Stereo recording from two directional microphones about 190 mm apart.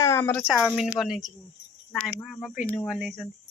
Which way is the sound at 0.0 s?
15° left (ahead or behind).